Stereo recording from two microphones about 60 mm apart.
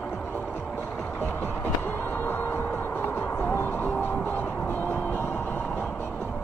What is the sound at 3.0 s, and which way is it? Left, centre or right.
Music, left.